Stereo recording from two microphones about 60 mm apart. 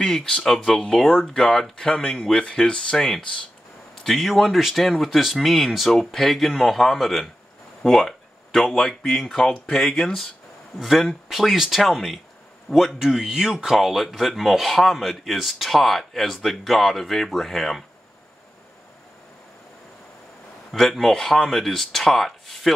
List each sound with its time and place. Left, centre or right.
0.0 s speech: centre
4.0 s a man's voice: centre
13.0 s speech: centre
20.7 s speech: centre